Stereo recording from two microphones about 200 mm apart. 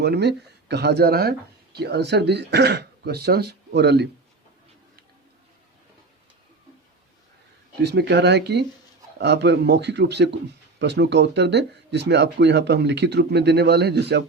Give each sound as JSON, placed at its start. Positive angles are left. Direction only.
{"t": 0.0, "sound": "speech", "side_deg": -55}
{"t": 7.8, "sound": "speech", "side_deg": -55}